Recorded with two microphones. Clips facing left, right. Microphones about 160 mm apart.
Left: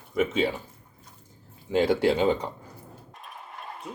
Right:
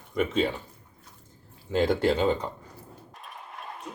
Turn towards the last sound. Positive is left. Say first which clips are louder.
# even
turn(degrees=0)  # may be behind; listen again after turning